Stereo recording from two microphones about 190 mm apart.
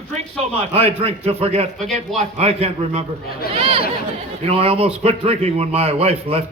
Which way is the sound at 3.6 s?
30° right (ahead or behind).